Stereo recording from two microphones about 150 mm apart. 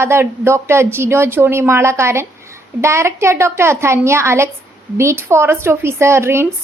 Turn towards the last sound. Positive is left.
turn(degrees=-15)  # may be behind; listen again after turning